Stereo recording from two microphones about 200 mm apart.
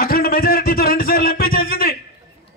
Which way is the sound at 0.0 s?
50° left (ahead or behind).